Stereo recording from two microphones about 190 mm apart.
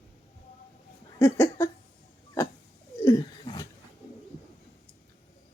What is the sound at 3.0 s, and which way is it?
Roaring cats, 20° left (ahead or behind).